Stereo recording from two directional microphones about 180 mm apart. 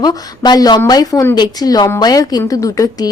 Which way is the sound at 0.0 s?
20° left (ahead or behind).